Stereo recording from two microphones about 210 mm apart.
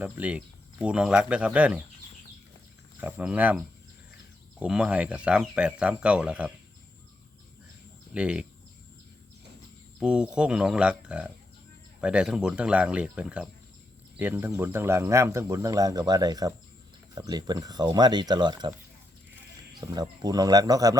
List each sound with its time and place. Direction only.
0.0 s speech: 5° right (ahead or behind)
3.0 s speech: 5° right (ahead or behind)
4.6 s speech: 5° right (ahead or behind)
8.1 s speech: 5° right (ahead or behind)
10.0 s speech: 5° right (ahead or behind); by 18.7 s 20° right (ahead or behind)
19.8 s speech: 20° right (ahead or behind)